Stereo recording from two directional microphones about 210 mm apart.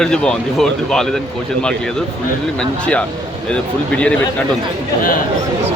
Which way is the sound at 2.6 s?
5° left (ahead or behind).